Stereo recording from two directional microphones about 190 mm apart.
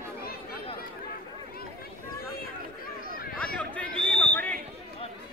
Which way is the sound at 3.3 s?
5° left (ahead or behind).